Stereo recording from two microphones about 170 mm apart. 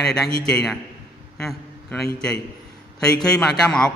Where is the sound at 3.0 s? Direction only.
5° left (ahead or behind).